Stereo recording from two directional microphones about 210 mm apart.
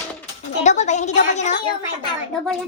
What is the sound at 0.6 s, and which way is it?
Speech, 35° left (ahead or behind).